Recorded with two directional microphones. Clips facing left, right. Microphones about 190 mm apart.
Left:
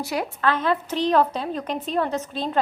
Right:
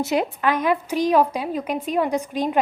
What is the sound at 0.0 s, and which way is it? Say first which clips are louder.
A woman's voice: right 3 dB; 20° right (ahead or behind).